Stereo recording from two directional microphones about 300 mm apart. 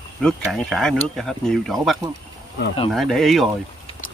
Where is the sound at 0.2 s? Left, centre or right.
Centre.